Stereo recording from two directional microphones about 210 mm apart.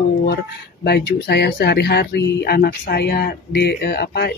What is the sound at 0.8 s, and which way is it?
Speech, 50° left (ahead or behind).